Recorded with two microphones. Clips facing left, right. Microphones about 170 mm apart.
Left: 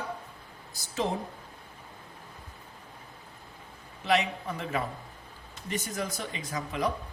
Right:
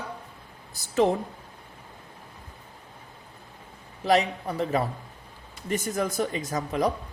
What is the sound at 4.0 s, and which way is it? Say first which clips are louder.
Speech: right 4 dB; 40° right (ahead or behind).